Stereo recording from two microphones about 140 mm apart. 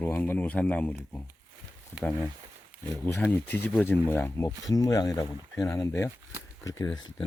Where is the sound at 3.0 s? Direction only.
15° left (ahead or behind).